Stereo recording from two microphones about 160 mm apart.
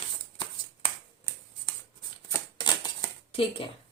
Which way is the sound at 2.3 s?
25° left (ahead or behind).